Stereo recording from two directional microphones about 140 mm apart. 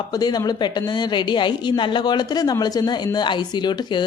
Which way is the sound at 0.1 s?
30° left (ahead or behind).